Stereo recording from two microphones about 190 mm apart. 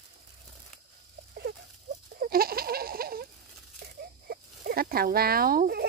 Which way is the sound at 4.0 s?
50° right (ahead or behind).